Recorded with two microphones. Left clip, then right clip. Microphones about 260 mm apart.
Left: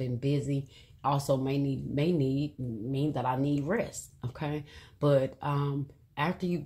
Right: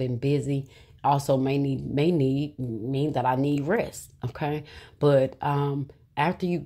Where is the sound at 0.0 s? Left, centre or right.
Right.